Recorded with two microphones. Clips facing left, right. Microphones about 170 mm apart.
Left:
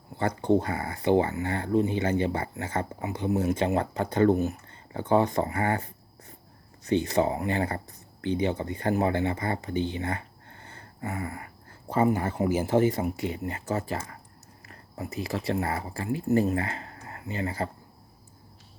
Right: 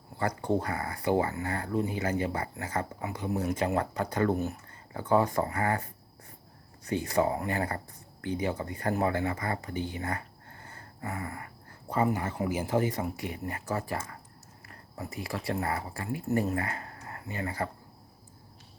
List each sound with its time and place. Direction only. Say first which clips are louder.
0.2 s speech: left 5 dB; 25° left (ahead or behind)